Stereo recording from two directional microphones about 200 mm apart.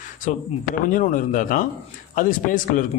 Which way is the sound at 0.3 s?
40° left (ahead or behind).